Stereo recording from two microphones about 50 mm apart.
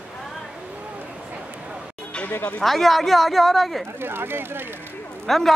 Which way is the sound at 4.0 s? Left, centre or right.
Right.